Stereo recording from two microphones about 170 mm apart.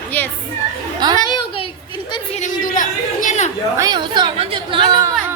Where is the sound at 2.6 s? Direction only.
50° left (ahead or behind).